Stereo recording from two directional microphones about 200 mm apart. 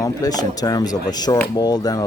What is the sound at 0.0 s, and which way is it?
Speech, 20° left (ahead or behind).